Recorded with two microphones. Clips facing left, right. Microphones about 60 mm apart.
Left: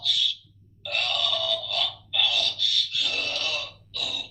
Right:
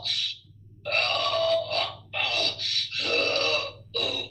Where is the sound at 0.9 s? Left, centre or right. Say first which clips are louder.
Right 3 dB; right.